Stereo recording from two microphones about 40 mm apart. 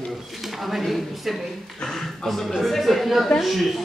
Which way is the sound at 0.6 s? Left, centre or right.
Centre.